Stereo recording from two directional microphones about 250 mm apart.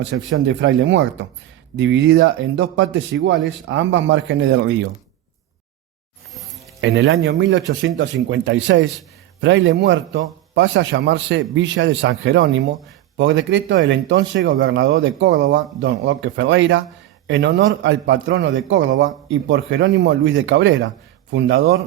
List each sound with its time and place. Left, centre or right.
0.0 s speech: right
6.8 s speech: right